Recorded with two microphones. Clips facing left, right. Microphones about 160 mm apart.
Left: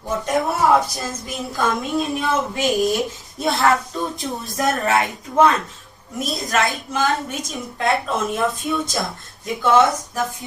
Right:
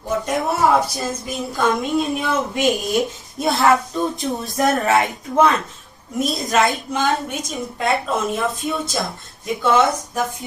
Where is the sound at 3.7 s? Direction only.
Centre (ahead or behind).